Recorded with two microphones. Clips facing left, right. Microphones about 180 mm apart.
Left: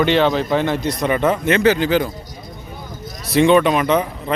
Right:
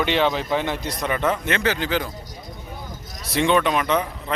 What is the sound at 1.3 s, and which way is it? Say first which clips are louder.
Speech: left 8 dB; 15° left (ahead or behind).